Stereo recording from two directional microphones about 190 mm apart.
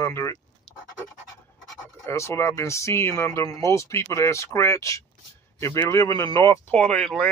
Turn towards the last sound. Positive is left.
turn(degrees=5)  # may be behind; listen again after turning